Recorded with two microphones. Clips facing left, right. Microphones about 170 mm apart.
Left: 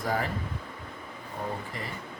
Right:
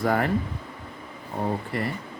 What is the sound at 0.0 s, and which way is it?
Speech, 60° right (ahead or behind).